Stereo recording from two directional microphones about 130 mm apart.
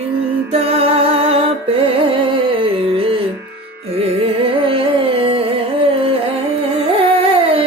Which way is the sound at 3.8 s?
50° right (ahead or behind).